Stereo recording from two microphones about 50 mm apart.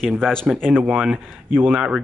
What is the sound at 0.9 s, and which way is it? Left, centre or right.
Speech, right.